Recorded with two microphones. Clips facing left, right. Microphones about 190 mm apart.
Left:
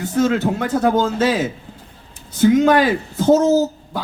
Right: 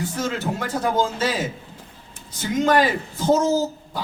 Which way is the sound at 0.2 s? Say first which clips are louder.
Left 11 dB; 60° left (ahead or behind).